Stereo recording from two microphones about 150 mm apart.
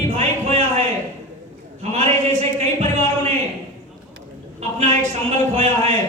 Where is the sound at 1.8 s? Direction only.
50° right (ahead or behind).